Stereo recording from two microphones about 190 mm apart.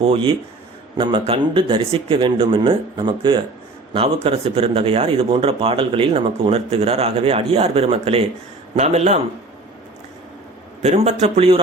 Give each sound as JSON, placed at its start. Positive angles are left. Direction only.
{"t": 0.0, "sound": "speech", "side_deg": -30}
{"t": 10.8, "sound": "speech", "side_deg": -35}